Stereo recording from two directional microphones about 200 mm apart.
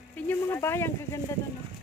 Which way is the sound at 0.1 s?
10° left (ahead or behind).